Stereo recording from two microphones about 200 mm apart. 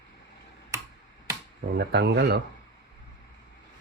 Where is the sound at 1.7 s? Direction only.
55° right (ahead or behind).